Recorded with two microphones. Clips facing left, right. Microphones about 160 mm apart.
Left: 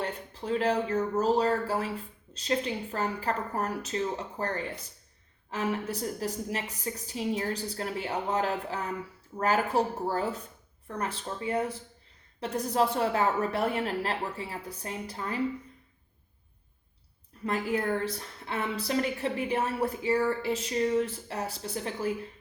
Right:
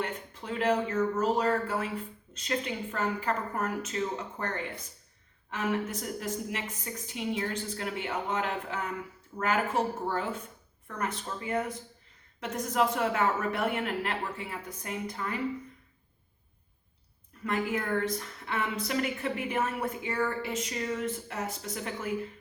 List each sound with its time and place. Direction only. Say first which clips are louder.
0.0 s a woman's voice: left 1 dB; 35° left (ahead or behind)
17.4 s a woman's voice: left 2 dB; 35° left (ahead or behind)